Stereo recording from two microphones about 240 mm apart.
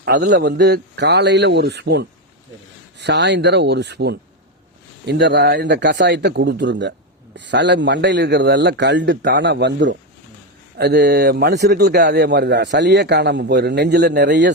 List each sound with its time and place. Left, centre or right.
0.0 s a man's voice: right